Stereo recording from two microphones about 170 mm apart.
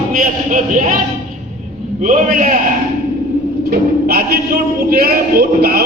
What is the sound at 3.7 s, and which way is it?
A man's voice, 65° right (ahead or behind).